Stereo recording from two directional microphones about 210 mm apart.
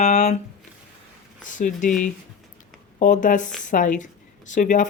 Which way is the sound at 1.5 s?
40° left (ahead or behind).